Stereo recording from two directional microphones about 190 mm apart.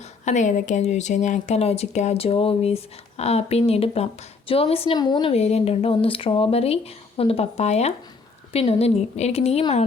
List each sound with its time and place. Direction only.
0.0 s speech: 40° left (ahead or behind)